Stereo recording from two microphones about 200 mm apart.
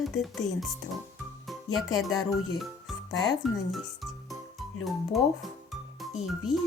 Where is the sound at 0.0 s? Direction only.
Centre (ahead or behind).